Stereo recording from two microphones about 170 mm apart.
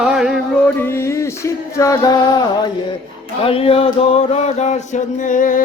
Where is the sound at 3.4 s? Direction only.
35° left (ahead or behind).